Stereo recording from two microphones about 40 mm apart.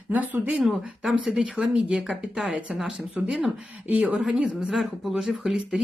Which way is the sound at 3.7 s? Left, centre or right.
Right.